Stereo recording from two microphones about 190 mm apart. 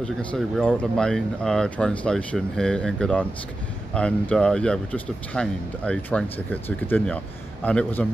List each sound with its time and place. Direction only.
0.0 s speech: 5° left (ahead or behind)